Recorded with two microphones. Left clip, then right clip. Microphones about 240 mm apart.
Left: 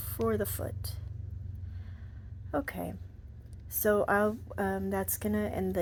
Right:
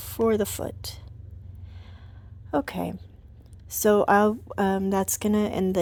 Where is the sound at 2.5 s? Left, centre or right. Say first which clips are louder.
Right 7 dB; right.